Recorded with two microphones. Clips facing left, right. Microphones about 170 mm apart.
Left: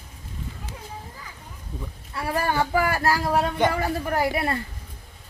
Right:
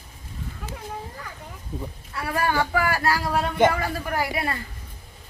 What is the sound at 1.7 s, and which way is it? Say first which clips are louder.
Speech: right 4 dB; 5° right (ahead or behind).